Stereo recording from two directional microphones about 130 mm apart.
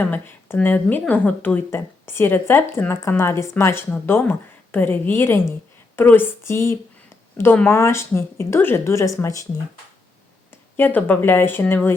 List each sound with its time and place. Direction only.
0.0 s speech: 15° left (ahead or behind)
10.8 s speech: 15° left (ahead or behind)